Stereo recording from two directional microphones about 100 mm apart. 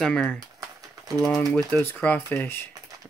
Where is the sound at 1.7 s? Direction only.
20° left (ahead or behind).